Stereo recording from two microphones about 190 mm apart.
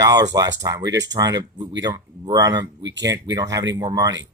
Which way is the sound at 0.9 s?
70° right (ahead or behind).